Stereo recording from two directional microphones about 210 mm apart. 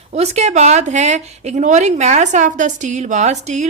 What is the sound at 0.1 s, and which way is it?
Speech, 30° right (ahead or behind).